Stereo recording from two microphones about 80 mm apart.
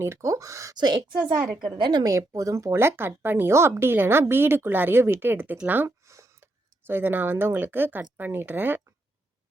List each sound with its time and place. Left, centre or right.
0.0 s speech: right
0.8 s a woman's voice: right
1.5 s a woman's voice: centre
1.7 s a woman's voice: right
2.0 s a woman's voice: right
6.1 s a sound: right
8.2 s a woman's voice: right